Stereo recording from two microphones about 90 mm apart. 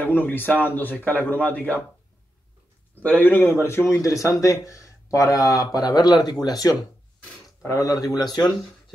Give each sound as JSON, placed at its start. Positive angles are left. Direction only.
{"t": 0.0, "sound": "speech", "side_deg": 20}
{"t": 3.0, "sound": "speech", "side_deg": 20}